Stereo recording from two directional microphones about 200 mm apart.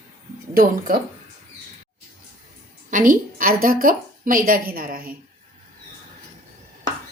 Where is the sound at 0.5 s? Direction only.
45° right (ahead or behind).